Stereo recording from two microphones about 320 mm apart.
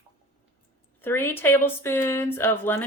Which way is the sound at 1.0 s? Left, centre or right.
Centre.